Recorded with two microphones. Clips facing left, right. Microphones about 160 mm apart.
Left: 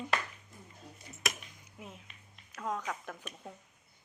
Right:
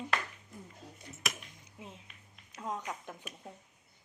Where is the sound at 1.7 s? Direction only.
25° right (ahead or behind).